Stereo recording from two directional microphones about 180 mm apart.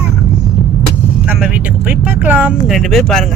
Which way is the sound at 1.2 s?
5° right (ahead or behind).